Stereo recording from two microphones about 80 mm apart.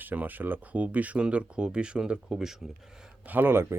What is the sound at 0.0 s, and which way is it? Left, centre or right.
Speech, right.